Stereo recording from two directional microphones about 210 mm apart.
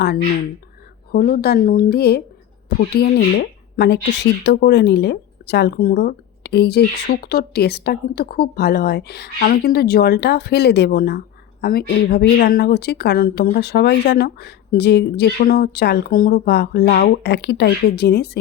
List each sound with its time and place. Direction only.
0.0 s speech: 50° left (ahead or behind)